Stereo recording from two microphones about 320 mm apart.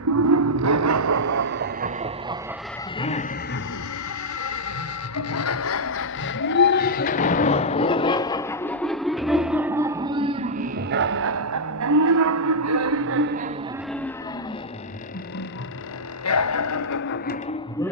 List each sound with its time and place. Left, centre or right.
0.2 s music: right
1.5 s music: right
3.0 s a sound: centre
5.1 s music: left; by 13.3 s right
16.2 s music: left